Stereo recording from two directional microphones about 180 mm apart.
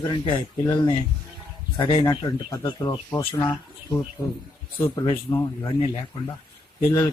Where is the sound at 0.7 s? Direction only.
25° left (ahead or behind).